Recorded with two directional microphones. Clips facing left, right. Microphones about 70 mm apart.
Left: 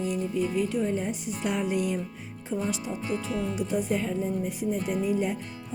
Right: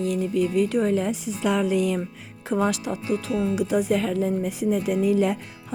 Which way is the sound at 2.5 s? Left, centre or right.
Right.